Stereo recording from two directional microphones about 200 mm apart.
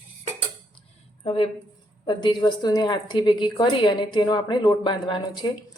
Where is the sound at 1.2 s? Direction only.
25° left (ahead or behind).